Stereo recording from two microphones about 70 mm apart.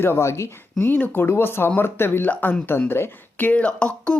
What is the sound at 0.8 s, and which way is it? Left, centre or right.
Speech, left.